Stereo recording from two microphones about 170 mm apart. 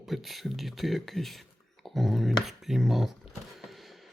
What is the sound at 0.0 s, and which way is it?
Speech, centre (ahead or behind).